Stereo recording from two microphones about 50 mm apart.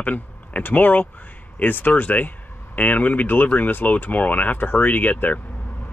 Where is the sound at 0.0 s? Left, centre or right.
Left.